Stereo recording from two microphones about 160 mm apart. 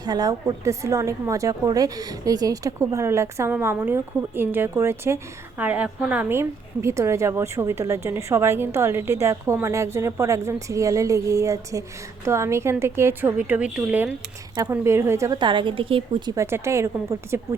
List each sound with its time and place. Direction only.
0.0 s a woman's voice: 25° right (ahead or behind)
16.3 s a woman's voice: 15° right (ahead or behind)